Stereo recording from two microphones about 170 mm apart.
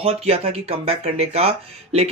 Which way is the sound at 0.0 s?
40° right (ahead or behind).